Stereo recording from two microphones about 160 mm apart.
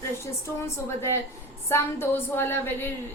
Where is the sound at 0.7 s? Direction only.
15° left (ahead or behind).